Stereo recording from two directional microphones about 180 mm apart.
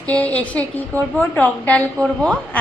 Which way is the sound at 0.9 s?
15° right (ahead or behind).